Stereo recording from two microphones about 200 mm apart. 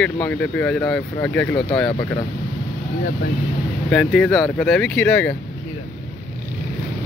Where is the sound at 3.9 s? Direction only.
5° left (ahead or behind).